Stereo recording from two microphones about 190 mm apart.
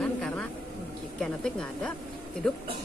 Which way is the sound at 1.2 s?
5° left (ahead or behind).